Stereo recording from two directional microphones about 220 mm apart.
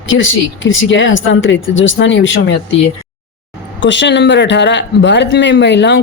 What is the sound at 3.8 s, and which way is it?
Speech, 55° left (ahead or behind).